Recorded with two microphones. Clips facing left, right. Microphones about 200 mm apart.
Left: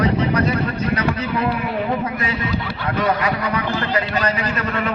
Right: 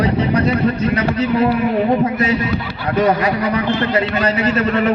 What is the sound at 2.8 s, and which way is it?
A man's voice, 30° right (ahead or behind).